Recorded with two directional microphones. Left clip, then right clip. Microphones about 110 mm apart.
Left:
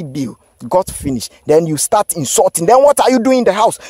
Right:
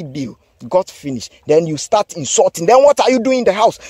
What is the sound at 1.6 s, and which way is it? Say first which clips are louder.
Speech: left 3 dB; 65° left (ahead or behind).